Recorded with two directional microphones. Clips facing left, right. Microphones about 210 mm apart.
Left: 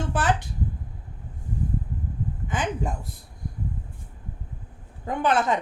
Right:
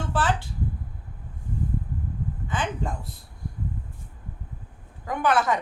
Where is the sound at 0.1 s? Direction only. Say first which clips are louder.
Even; 20° left (ahead or behind).